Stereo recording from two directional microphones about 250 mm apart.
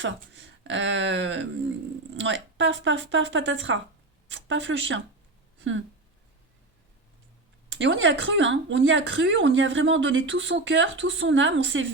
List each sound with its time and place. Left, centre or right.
0.6 s speech: right
7.7 s speech: right